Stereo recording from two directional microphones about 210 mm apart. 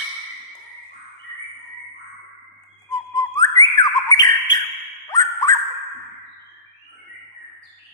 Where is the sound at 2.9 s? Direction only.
15° left (ahead or behind).